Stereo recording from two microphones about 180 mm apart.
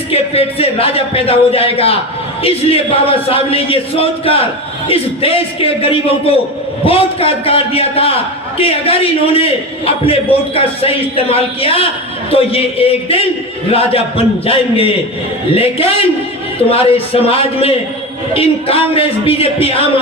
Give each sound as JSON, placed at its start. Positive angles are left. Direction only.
{"t": 0.1, "sound": "a man's voice", "side_deg": 35}